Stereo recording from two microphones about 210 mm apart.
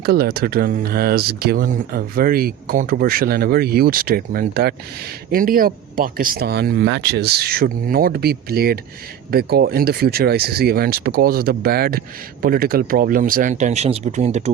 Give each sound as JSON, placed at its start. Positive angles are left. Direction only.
{"t": 0.0, "sound": "speech", "side_deg": -45}